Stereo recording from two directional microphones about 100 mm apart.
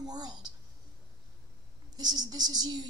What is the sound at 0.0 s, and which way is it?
Speech, 40° right (ahead or behind).